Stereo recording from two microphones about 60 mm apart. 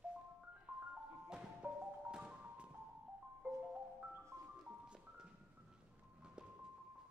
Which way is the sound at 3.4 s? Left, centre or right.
Right.